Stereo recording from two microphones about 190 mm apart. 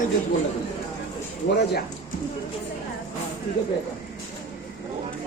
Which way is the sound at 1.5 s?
55° left (ahead or behind).